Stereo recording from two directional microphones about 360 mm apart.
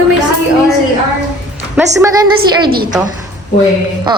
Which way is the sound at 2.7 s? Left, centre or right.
Right.